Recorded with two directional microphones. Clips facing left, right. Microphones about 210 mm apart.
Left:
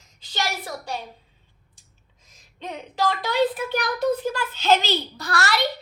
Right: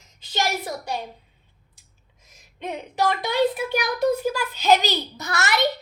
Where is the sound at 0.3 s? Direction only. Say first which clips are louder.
Right 3 dB; 20° right (ahead or behind).